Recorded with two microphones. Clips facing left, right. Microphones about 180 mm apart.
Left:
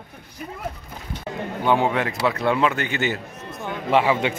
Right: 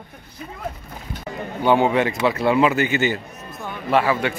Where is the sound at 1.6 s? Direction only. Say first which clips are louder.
Right 3 dB; centre (ahead or behind).